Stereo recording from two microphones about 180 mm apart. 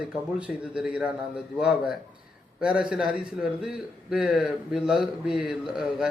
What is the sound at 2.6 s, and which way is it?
A man's voice, 5° right (ahead or behind).